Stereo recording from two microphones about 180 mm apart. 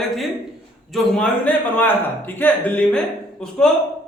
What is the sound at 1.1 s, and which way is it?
A man's voice, 5° left (ahead or behind).